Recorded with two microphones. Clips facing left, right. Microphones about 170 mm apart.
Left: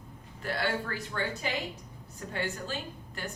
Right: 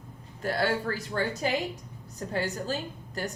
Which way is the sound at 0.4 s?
40° right (ahead or behind).